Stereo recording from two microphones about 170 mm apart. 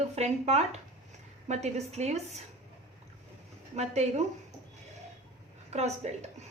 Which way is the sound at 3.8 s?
40° right (ahead or behind).